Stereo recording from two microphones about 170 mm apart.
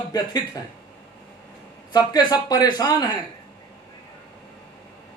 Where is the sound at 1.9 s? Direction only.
25° left (ahead or behind).